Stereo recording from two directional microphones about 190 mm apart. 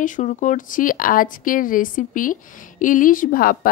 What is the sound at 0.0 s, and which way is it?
A woman's voice, 40° left (ahead or behind).